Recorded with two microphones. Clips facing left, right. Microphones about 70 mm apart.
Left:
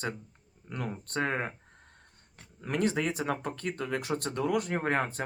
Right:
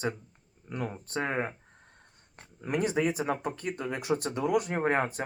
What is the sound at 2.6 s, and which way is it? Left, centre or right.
Speech, centre.